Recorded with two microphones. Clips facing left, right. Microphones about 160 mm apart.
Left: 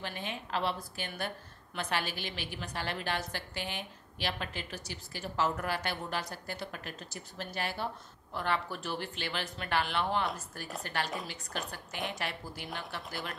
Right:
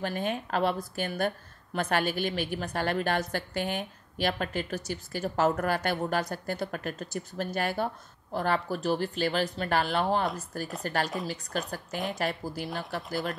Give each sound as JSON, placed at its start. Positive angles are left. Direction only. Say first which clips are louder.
{"t": 0.0, "sound": "a woman's voice", "louder": "right 9 dB", "side_deg": -45}